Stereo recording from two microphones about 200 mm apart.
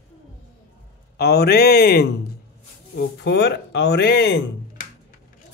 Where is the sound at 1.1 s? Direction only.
55° left (ahead or behind).